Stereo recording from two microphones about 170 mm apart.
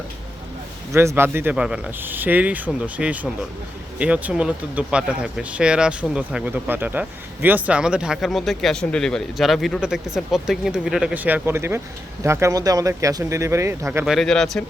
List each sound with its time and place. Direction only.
0.9 s speech: 15° right (ahead or behind)
14.0 s speech: centre (ahead or behind)